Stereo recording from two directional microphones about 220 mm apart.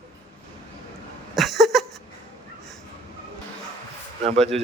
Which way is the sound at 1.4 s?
Centre (ahead or behind).